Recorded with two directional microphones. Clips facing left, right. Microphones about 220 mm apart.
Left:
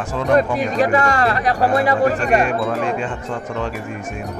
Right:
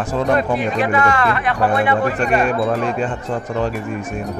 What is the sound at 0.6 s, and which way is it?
Speech, 40° left (ahead or behind).